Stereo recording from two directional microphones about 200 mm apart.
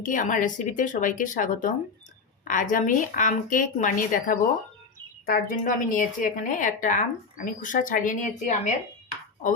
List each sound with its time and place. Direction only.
0.0 s a woman's voice: 40° left (ahead or behind)